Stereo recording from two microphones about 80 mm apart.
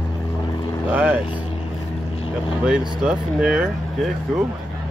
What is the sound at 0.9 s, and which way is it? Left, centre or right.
Speech, centre.